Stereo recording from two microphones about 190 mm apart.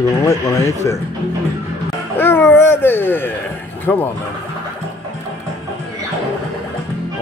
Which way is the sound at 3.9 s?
10° left (ahead or behind).